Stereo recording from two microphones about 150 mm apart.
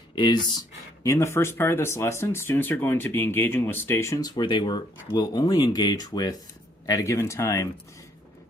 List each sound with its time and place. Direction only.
0.2 s speech: 30° left (ahead or behind)
1.0 s speech: 20° left (ahead or behind)